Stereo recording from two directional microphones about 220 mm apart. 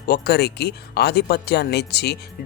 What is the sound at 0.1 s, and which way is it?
Speech, 45° left (ahead or behind).